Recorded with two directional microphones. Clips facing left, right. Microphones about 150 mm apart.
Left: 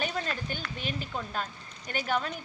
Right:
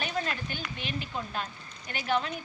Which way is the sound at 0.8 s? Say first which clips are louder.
Even; 45° left (ahead or behind).